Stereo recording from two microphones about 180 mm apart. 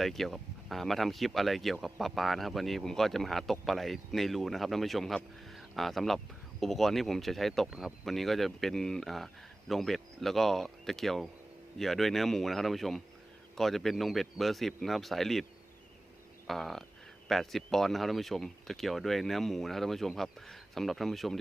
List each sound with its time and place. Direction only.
0.0 s speech: centre (ahead or behind)
16.5 s speech: centre (ahead or behind)